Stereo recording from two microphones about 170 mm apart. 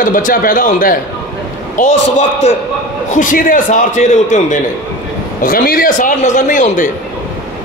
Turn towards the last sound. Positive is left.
turn(degrees=50)  # may be behind; listen again after turning